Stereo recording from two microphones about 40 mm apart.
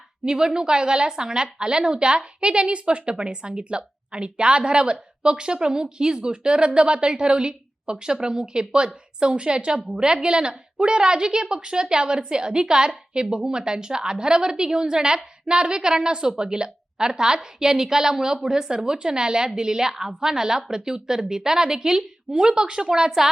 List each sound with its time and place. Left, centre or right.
0.3 s a woman's voice: centre